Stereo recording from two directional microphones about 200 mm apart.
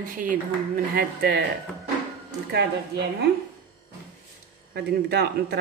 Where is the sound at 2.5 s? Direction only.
55° right (ahead or behind).